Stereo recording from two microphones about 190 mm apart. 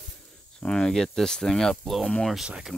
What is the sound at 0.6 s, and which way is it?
Speech, 5° left (ahead or behind).